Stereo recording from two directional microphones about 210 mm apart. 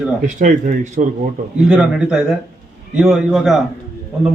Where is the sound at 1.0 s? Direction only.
40° right (ahead or behind).